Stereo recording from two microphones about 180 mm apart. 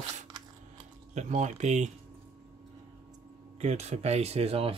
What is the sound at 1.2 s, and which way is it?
Speech, 40° right (ahead or behind).